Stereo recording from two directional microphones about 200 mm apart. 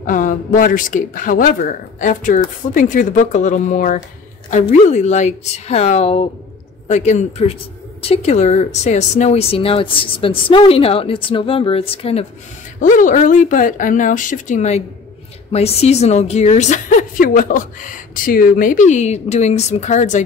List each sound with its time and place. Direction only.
0.0 s a woman's voice: 40° left (ahead or behind)
12.8 s a woman's voice: 40° left (ahead or behind)